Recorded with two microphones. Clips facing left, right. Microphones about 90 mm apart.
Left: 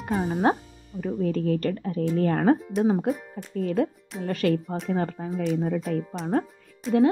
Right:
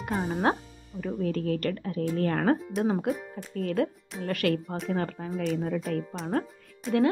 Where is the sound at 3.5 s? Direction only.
25° left (ahead or behind).